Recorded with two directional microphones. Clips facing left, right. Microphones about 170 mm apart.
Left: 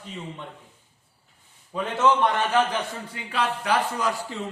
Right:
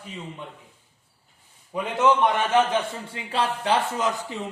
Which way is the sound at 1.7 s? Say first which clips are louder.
Right 1 dB; 15° right (ahead or behind).